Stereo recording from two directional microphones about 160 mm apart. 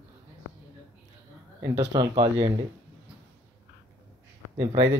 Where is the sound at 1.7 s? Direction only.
25° right (ahead or behind).